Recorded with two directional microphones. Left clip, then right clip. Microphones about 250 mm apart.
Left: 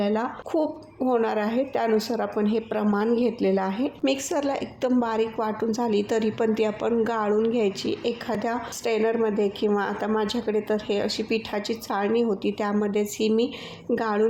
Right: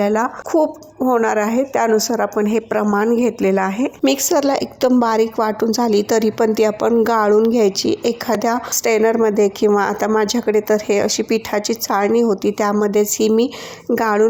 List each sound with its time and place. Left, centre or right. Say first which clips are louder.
0.0 s a woman's voice: right 9 dB; right